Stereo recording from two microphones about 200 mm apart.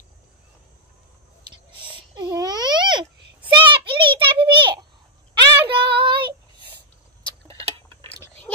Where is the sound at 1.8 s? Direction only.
20° right (ahead or behind).